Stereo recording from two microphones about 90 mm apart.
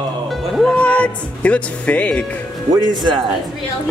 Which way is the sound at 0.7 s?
15° left (ahead or behind).